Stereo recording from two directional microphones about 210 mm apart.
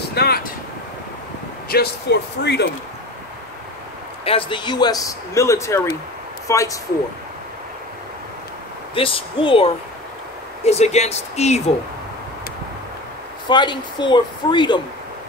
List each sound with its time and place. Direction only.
0.1 s speech: 50° left (ahead or behind)
1.7 s speech: 50° left (ahead or behind)
4.2 s a man's voice: 25° left (ahead or behind)
8.9 s a man's voice: 25° left (ahead or behind)
13.5 s a man's voice: 20° left (ahead or behind)